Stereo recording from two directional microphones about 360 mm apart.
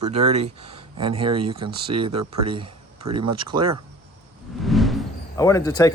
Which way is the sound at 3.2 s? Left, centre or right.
Centre.